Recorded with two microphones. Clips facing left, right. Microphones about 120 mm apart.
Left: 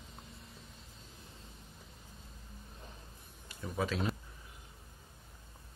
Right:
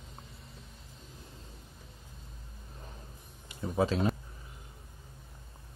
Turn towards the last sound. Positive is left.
turn(degrees=-30)  # may be behind; listen again after turning